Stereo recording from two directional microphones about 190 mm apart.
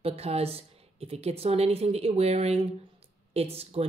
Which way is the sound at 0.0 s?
30° right (ahead or behind).